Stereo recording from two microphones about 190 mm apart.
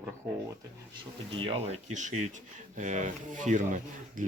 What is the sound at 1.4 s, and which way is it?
Speech, 25° right (ahead or behind).